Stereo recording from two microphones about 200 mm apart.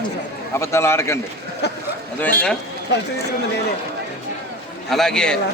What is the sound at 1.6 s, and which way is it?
Speech, 55° left (ahead or behind).